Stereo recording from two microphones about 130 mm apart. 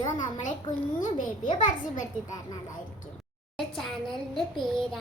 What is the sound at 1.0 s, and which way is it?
Speech, 85° left.